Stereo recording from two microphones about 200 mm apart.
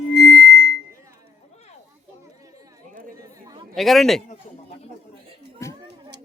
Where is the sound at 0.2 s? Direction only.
60° left (ahead or behind).